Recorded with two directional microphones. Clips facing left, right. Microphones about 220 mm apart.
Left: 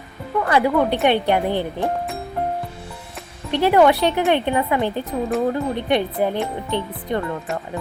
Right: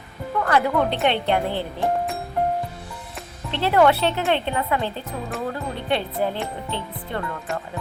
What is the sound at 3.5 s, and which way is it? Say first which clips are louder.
A woman's voice: left 3 dB; 15° left (ahead or behind).